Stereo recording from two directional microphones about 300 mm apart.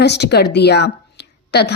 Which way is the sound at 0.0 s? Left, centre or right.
Left.